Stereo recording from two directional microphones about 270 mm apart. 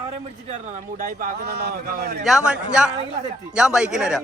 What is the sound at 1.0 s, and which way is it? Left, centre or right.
A man's voice, right.